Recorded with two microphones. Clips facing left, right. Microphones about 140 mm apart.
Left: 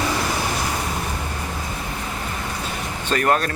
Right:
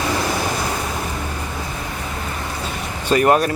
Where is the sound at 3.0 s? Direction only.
15° right (ahead or behind).